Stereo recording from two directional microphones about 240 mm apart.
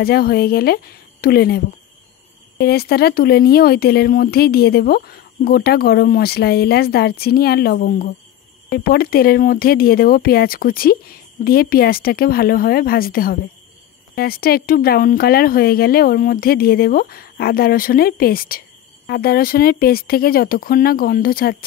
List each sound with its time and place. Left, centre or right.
0.0 s speech: left
2.6 s speech: left